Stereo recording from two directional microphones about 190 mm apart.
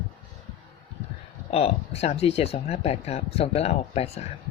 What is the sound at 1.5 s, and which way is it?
Speech, 30° left (ahead or behind).